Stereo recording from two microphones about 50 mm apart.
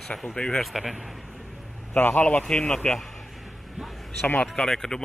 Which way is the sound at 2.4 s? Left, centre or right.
Centre.